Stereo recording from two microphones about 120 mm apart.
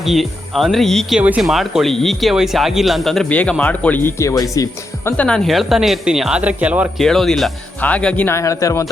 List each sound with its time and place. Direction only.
0.0 s speech: centre (ahead or behind)
4.2 s speech: 25° left (ahead or behind)
5.1 s speech: 10° left (ahead or behind)
5.5 s speech: centre (ahead or behind)
7.0 s speech: 5° left (ahead or behind)
7.8 s speech: 10° left (ahead or behind)
8.4 s speech: 25° left (ahead or behind)